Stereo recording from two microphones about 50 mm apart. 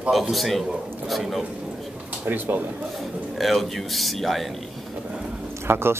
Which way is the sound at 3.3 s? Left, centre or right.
Centre.